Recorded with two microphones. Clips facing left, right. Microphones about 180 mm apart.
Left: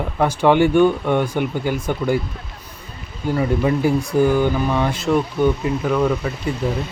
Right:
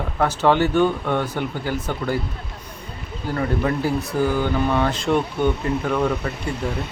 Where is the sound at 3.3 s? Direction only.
15° left (ahead or behind).